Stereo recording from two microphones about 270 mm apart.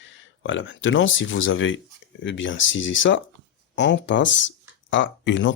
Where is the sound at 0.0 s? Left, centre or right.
Left.